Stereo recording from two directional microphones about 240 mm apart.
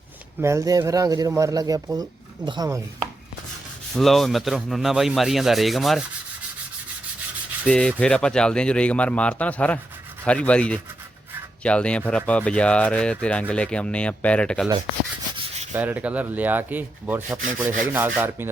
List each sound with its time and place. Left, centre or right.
0.4 s speech: centre
3.9 s speech: centre
7.6 s speech: centre
15.4 s rub: right
15.7 s speech: centre